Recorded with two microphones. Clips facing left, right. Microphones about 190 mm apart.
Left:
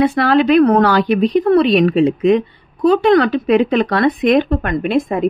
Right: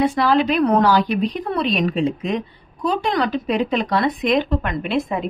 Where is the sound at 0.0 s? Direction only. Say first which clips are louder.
Left 4 dB; 60° left (ahead or behind).